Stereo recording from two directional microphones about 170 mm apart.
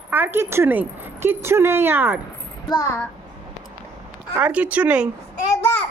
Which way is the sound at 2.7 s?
20° left (ahead or behind).